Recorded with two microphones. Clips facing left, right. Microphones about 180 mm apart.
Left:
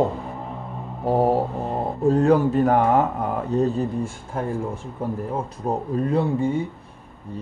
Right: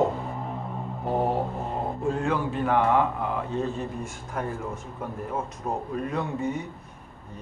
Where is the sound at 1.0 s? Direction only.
35° left (ahead or behind).